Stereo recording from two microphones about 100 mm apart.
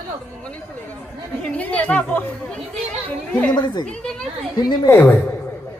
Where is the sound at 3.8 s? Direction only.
5° left (ahead or behind).